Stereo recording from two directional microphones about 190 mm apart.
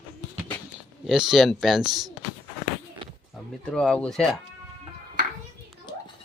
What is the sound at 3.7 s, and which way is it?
Speech, 5° left (ahead or behind).